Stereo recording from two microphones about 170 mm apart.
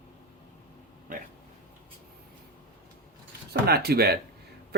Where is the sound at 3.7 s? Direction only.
70° right (ahead or behind).